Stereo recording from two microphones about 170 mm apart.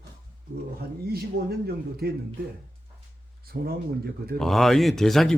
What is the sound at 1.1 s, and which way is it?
Speech, 70° right (ahead or behind).